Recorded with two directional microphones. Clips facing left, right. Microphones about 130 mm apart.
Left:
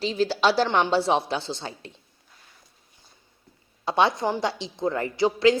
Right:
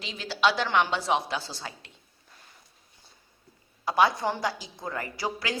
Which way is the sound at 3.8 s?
25° left (ahead or behind).